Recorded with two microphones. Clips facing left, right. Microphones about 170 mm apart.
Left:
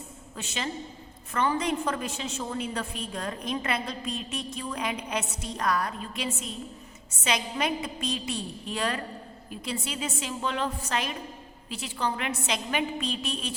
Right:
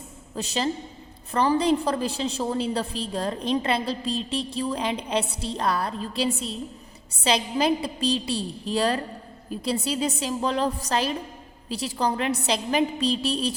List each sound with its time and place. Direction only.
0.3 s a woman's voice: 35° right (ahead or behind)